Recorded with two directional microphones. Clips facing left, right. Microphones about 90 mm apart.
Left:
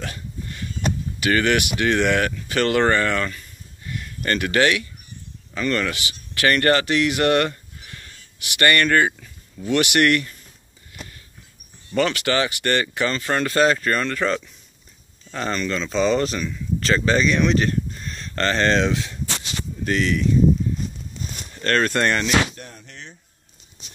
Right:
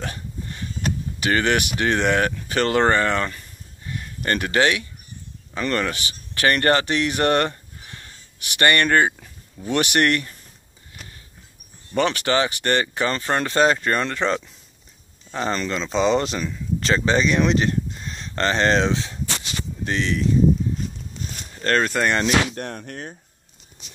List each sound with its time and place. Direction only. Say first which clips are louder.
0.0 s a sound: right 1 dB; 30° right (ahead or behind)
1.2 s speech: left 1 dB; 30° right (ahead or behind)
3.8 s a sound: even; 30° right (ahead or behind)
5.5 s a man's voice: left 1 dB; 25° right (ahead or behind)
5.8 s speech: even; 35° right (ahead or behind)
9.7 s speech: left 2 dB; 40° right (ahead or behind)
11.9 s speech: even; 25° right (ahead or behind)
21.5 s speech: even; 20° right (ahead or behind)
22.5 s speech: right 9 dB; 60° right (ahead or behind)